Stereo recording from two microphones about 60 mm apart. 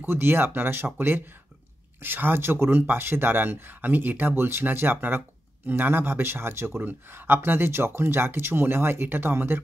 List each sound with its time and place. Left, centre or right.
0.0 s speech: right